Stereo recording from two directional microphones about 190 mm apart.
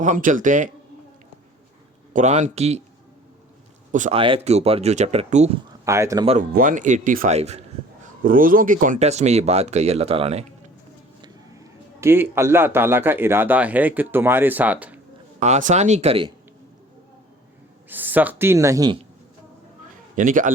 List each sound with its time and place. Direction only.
0.0 s a man's voice: 40° right (ahead or behind)
2.1 s speech: 40° right (ahead or behind)
3.9 s speech: 40° right (ahead or behind)
4.2 s speech: 30° right (ahead or behind)
5.8 s speech: 15° right (ahead or behind)
6.5 s speech: 45° right (ahead or behind)
8.0 s speech: 45° right (ahead or behind)
11.2 s a man's voice: 15° right (ahead or behind)
15.4 s speech: 40° right (ahead or behind)
17.8 s speech: 10° right (ahead or behind)
20.1 s a man's voice: 45° right (ahead or behind)